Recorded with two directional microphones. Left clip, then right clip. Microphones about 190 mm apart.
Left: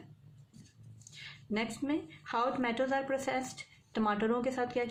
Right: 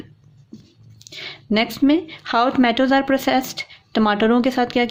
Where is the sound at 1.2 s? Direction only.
40° right (ahead or behind).